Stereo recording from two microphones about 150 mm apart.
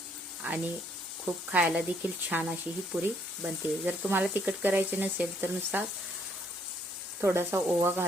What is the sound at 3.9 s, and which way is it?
Speech, 10° right (ahead or behind).